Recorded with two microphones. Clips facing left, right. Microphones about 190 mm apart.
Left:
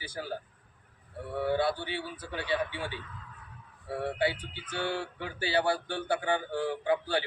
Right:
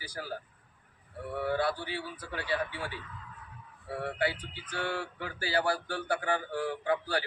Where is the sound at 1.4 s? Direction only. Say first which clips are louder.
Left 2 dB; 25° left (ahead or behind).